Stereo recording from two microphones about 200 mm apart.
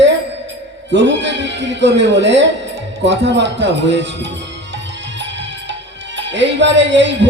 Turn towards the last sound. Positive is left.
turn(degrees=-65)  # may be behind; listen again after turning